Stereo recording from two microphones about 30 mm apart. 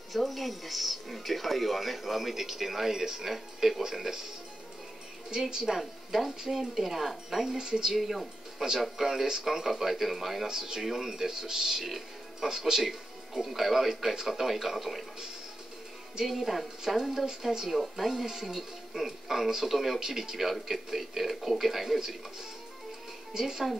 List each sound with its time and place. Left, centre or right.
0.1 s speech: centre
5.5 s speech: centre
7.4 s speech: right
7.9 s speech: centre
10.5 s speech: centre
10.8 s speech: centre
11.8 s music: centre
12.4 s speech: centre
12.8 s speech: centre
16.3 s speech: centre
18.1 s speech: centre
23.3 s speech: right